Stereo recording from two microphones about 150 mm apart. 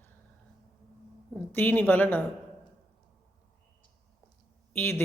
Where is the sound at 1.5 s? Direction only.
15° left (ahead or behind).